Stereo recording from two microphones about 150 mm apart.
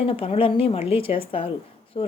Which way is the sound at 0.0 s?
40° left (ahead or behind).